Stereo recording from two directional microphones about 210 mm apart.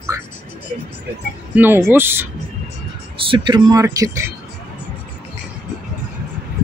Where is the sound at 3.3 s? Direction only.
20° right (ahead or behind).